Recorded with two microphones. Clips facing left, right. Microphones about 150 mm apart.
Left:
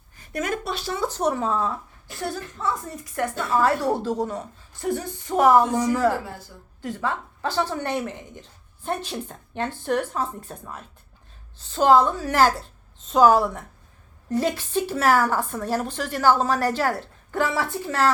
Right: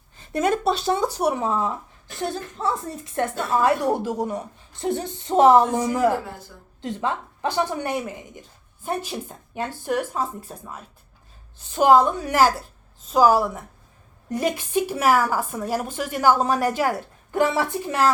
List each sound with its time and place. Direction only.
0.2 s speech: 30° right (ahead or behind)
1.0 s a woman's voice: 10° right (ahead or behind)
4.8 s a woman's voice: 25° right (ahead or behind)